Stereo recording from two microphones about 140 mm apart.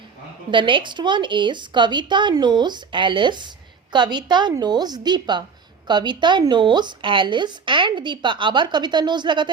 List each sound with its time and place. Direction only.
0.5 s a woman's voice: 35° right (ahead or behind)